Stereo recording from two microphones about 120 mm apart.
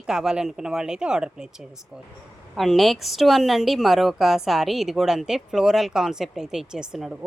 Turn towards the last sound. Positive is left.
turn(degrees=-5)  # may be behind; listen again after turning